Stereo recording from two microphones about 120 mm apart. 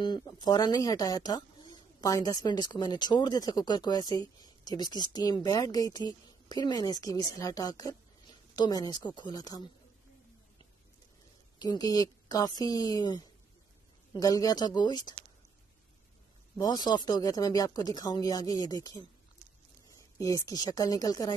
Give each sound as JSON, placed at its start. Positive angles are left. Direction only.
{"t": 0.0, "sound": "speech", "side_deg": 35}
{"t": 11.5, "sound": "speech", "side_deg": 35}
{"t": 16.5, "sound": "a woman's voice", "side_deg": 35}